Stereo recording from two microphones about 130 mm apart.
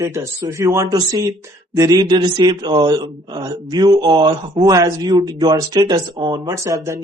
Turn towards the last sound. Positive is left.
turn(degrees=-25)  # may be behind; listen again after turning